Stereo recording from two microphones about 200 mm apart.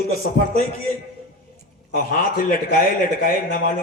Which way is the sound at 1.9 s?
45° left (ahead or behind).